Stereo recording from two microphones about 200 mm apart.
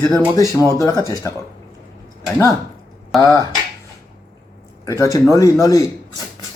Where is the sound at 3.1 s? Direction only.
15° left (ahead or behind).